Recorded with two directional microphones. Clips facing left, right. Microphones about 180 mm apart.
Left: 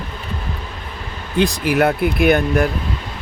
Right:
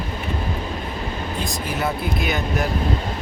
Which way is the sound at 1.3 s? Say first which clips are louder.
Left 14 dB; 70° left (ahead or behind).